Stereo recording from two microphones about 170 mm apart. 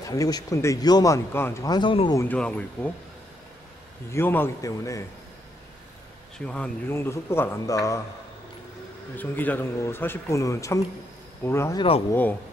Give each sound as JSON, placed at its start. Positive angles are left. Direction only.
{"t": 0.0, "sound": "speech", "side_deg": 20}
{"t": 2.1, "sound": "speech", "side_deg": 10}
{"t": 4.1, "sound": "speech", "side_deg": 10}
{"t": 6.3, "sound": "speech", "side_deg": 5}
{"t": 9.1, "sound": "speech", "side_deg": 10}